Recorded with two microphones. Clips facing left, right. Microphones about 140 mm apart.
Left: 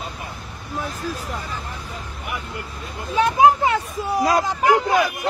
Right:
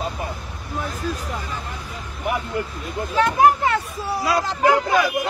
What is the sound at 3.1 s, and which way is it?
Speech, 15° left (ahead or behind).